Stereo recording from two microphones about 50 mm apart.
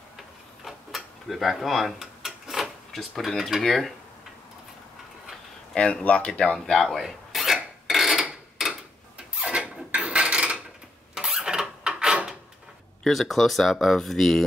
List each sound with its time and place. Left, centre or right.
0.7 s a sound: centre
6.0 s speech: left
6.4 s filing: centre
8.6 s tick-tock: centre
9.3 s a sound: right
13.0 s speech: centre